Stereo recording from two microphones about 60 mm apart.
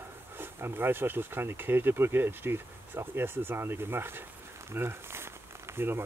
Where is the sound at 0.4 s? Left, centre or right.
Right.